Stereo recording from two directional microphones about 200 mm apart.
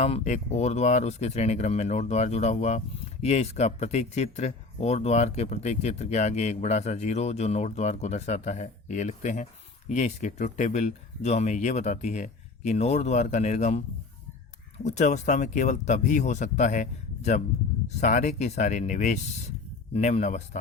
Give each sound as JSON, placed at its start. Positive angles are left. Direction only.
{"t": 0.0, "sound": "speech", "side_deg": 35}
{"t": 14.8, "sound": "speech", "side_deg": 35}